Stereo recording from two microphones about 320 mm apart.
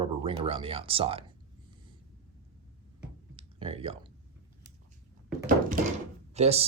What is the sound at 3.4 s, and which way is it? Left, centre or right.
Computer keyboard, centre.